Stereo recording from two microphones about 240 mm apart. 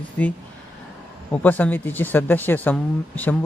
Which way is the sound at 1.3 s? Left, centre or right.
Centre.